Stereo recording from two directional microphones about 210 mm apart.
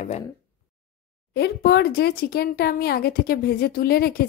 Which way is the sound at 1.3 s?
50° left (ahead or behind).